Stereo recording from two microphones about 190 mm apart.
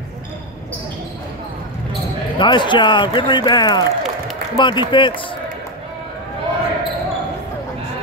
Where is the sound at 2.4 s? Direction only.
25° left (ahead or behind).